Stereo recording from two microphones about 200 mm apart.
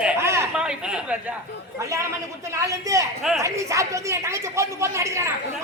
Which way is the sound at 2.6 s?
15° right (ahead or behind).